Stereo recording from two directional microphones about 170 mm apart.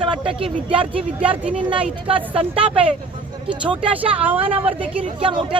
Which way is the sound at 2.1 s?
30° right (ahead or behind).